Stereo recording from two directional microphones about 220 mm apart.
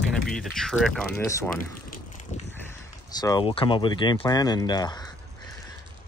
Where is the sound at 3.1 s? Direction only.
20° left (ahead or behind).